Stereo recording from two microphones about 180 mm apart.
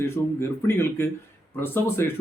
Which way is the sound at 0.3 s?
15° left (ahead or behind).